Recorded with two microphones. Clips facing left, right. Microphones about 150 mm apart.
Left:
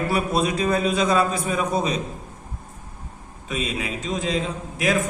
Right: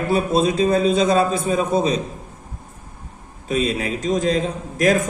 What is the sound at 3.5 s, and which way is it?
A man's voice, 35° right (ahead or behind).